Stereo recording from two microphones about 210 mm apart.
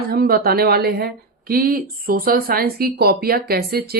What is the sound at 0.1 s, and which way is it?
Speech, 50° right (ahead or behind).